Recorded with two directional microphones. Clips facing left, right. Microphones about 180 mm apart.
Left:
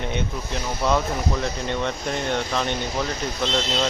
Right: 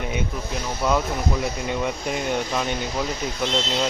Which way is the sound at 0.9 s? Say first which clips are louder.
Even; 5° right (ahead or behind).